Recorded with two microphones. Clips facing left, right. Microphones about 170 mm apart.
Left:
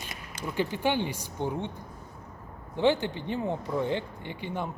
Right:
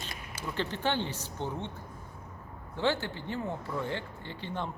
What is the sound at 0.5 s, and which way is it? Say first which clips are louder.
Speech: left 4 dB; 10° left (ahead or behind).